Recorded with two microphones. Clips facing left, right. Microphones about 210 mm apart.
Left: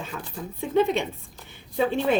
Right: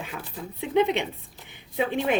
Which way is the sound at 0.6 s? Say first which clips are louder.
Left 1 dB; 20° right (ahead or behind).